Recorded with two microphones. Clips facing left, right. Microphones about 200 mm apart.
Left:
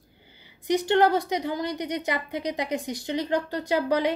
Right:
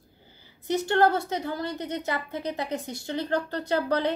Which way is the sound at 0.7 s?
15° left (ahead or behind).